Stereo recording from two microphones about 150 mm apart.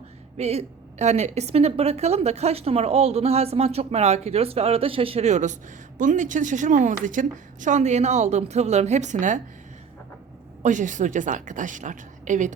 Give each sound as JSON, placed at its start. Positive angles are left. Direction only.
{"t": 0.3, "sound": "a woman's voice", "side_deg": -45}
{"t": 10.6, "sound": "a woman's voice", "side_deg": -55}